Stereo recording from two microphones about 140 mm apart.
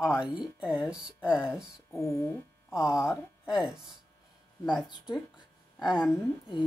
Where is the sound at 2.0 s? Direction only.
20° left (ahead or behind).